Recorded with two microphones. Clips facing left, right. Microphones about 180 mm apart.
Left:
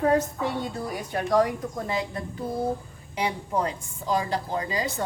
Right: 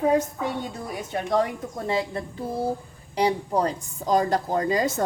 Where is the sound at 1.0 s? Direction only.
25° right (ahead or behind).